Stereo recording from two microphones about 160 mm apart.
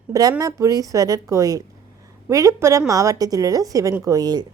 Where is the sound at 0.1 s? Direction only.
20° right (ahead or behind).